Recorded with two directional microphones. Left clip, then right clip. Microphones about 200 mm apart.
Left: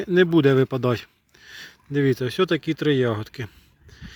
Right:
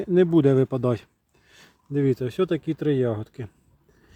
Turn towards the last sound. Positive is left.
turn(degrees=0)  # may be behind; listen again after turning